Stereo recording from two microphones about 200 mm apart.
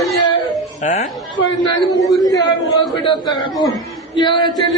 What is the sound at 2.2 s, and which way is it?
A man's voice, 20° left (ahead or behind).